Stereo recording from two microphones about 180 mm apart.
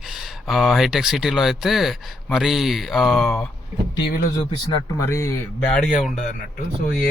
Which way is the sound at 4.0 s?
70° left (ahead or behind).